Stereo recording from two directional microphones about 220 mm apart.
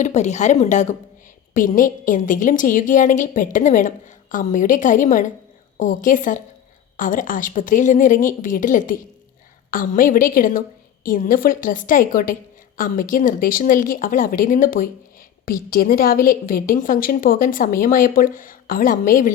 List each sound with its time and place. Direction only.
0.0 s a woman's voice: 30° left (ahead or behind)